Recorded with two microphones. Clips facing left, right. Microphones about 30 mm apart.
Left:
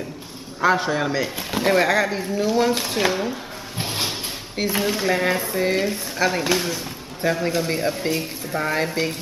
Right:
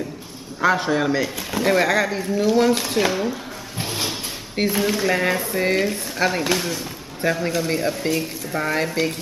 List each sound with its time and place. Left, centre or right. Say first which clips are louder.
0.7 s speech: right 2 dB; centre
3.7 s a sound: even; centre
4.6 s speech: right 3 dB; centre
5.0 s speech: even; centre